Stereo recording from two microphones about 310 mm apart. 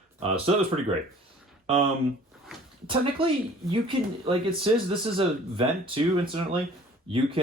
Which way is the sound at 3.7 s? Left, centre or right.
Centre.